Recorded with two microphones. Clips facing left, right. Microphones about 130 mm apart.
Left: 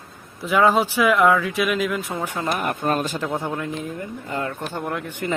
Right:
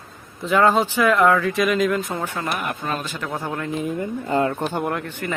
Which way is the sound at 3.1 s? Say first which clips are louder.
Left 3 dB; 25° left (ahead or behind).